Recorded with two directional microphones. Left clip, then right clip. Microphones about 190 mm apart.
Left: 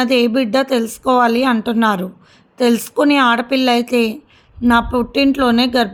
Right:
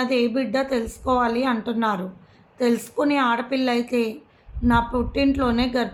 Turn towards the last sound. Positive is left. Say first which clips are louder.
# left 8 dB
turn(degrees=50)  # may be behind; listen again after turning